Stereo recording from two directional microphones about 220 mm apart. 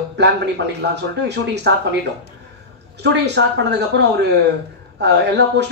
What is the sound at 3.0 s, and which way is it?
Speech, 50° right (ahead or behind).